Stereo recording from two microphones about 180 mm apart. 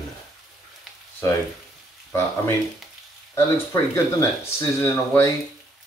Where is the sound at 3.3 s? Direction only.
15° left (ahead or behind).